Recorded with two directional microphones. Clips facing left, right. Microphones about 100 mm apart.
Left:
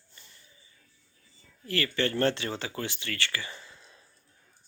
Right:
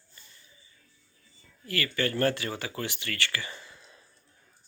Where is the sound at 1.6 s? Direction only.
30° left (ahead or behind).